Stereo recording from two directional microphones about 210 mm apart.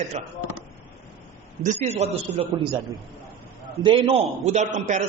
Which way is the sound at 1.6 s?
30° right (ahead or behind).